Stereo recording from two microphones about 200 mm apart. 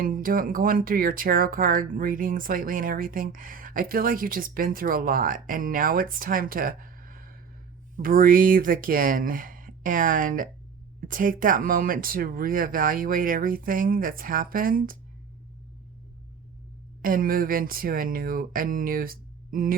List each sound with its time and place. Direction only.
0.0 s speech: 45° right (ahead or behind)
17.0 s speech: 45° right (ahead or behind)